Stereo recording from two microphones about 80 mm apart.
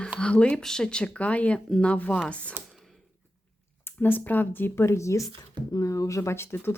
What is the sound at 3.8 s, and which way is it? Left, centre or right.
Speech, left.